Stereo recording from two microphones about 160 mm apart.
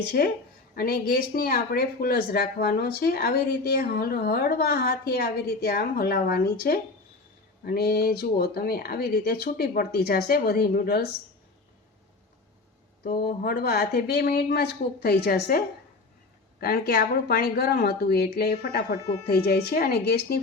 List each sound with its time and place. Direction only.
0.8 s speech: 70° left (ahead or behind)
13.1 s speech: 70° left (ahead or behind)